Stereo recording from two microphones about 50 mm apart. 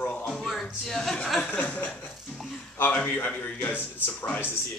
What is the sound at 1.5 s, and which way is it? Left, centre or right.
Chuckle, left.